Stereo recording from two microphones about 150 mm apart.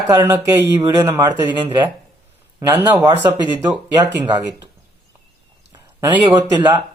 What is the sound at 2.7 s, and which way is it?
Speech, 20° right (ahead or behind).